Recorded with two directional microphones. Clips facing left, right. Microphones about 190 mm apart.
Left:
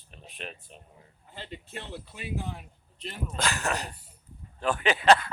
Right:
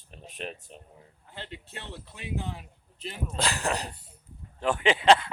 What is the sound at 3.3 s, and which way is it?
Speech, 35° right (ahead or behind).